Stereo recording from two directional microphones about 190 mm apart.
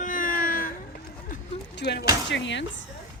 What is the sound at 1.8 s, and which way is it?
Speech, 60° left (ahead or behind).